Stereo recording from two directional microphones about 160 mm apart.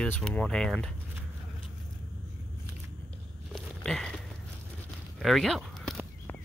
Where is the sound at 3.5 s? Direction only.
5° left (ahead or behind).